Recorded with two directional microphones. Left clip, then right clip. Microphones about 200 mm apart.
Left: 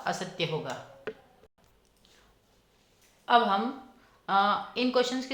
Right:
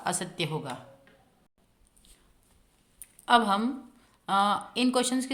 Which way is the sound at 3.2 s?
50° right (ahead or behind).